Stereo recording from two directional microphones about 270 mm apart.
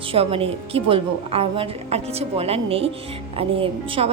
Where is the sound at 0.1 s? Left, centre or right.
Right.